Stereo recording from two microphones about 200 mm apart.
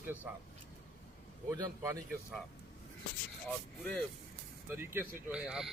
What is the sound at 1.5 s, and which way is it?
Speech, 15° right (ahead or behind).